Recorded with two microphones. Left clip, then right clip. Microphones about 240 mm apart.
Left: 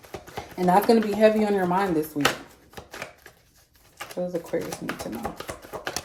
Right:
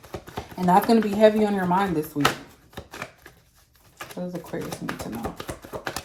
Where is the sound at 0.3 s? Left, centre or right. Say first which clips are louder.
Right 1 dB; centre.